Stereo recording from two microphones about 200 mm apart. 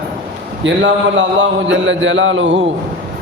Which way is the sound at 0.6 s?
65° right (ahead or behind).